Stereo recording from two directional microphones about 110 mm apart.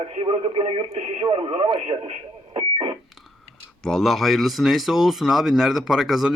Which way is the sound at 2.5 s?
55° right (ahead or behind).